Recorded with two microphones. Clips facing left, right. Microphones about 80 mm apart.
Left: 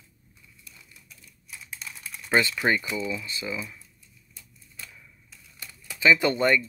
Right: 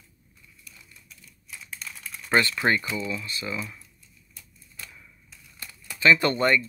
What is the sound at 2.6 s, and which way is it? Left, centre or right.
Speech, right.